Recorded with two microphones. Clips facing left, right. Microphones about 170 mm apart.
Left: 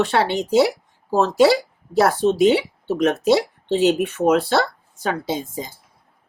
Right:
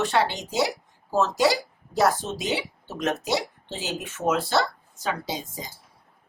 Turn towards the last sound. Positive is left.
turn(degrees=55)  # may be behind; listen again after turning